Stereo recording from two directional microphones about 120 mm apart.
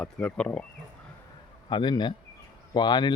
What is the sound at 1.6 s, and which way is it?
Speech, 40° left (ahead or behind).